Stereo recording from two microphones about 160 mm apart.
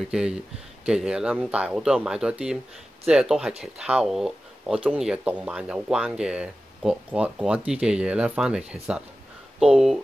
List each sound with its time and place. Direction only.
0.1 s speech: 5° right (ahead or behind)